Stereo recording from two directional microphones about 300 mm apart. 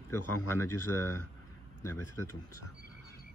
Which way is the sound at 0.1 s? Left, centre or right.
Left.